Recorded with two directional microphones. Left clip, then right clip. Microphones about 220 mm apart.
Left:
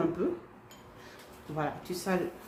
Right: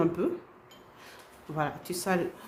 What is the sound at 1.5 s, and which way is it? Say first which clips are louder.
Speech: right 2 dB; 40° right (ahead or behind).